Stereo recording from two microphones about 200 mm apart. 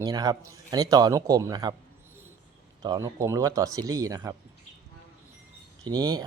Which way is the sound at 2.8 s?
20° right (ahead or behind).